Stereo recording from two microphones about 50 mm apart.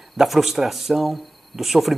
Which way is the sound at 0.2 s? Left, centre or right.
Centre.